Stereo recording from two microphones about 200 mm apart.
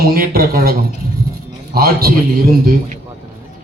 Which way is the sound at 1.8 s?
50° right (ahead or behind).